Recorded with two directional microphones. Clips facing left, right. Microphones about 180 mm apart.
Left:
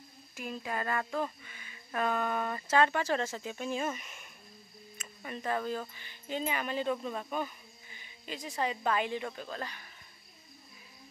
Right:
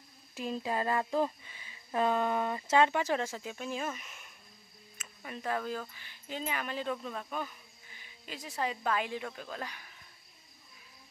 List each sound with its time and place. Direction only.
0.3 s speech: 25° right (ahead or behind); by 9.8 s 5° right (ahead or behind)